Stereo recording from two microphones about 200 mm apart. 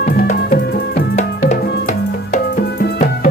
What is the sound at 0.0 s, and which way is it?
Music, 45° left (ahead or behind).